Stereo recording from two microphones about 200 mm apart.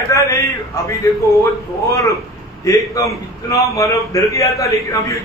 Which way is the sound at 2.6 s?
15° left (ahead or behind).